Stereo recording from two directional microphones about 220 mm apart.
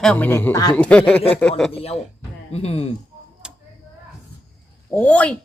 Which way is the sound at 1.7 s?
25° left (ahead or behind).